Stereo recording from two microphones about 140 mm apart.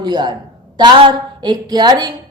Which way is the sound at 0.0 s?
30° right (ahead or behind).